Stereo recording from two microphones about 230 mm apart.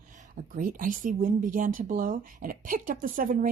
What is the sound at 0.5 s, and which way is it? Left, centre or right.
Speech, right.